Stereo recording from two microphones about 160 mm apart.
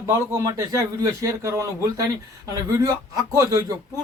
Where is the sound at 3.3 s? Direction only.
20° right (ahead or behind).